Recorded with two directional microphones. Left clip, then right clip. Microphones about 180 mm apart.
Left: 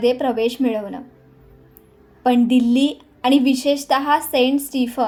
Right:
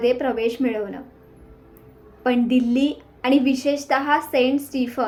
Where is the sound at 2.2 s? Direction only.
50° left (ahead or behind).